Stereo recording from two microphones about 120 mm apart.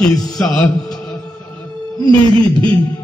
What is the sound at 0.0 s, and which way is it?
Speech, 5° left (ahead or behind).